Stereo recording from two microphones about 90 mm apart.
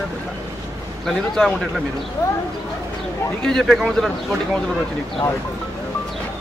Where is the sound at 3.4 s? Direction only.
5° left (ahead or behind).